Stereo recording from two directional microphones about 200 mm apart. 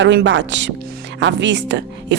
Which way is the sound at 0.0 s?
65° right (ahead or behind).